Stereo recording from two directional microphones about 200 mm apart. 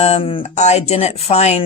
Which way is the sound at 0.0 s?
30° left (ahead or behind).